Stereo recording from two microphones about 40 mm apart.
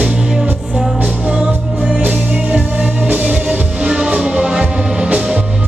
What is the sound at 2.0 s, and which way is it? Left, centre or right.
Music, right.